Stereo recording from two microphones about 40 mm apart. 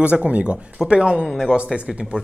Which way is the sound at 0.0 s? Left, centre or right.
Right.